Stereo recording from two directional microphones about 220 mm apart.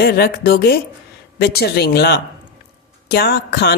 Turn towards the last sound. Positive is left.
turn(degrees=45)  # may be behind; listen again after turning